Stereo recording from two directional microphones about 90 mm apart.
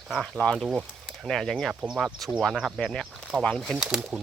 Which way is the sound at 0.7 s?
5° right (ahead or behind).